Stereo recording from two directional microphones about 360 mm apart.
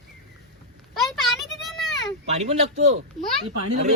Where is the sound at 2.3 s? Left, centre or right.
Centre.